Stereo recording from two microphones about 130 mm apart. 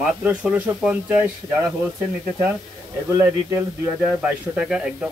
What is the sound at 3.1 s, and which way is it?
Speech, 20° right (ahead or behind).